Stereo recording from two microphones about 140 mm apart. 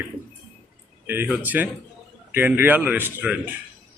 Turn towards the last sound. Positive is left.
turn(degrees=-15)  # may be behind; listen again after turning